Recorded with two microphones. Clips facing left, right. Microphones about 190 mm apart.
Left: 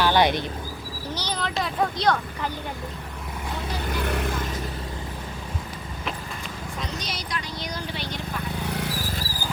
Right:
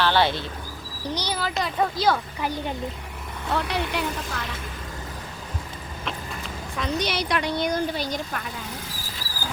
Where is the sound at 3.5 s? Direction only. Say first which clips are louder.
Right 5 dB; 70° right (ahead or behind).